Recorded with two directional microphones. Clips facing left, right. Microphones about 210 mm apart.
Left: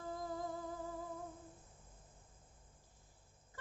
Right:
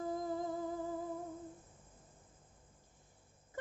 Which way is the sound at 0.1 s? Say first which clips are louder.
Right 2 dB; 20° right (ahead or behind).